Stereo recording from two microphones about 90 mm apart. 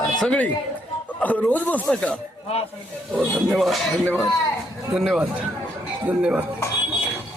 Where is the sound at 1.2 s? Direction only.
15° left (ahead or behind).